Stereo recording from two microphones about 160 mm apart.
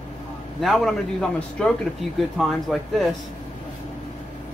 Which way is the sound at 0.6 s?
Centre (ahead or behind).